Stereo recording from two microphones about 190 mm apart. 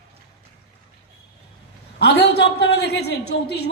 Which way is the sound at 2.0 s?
60° left (ahead or behind).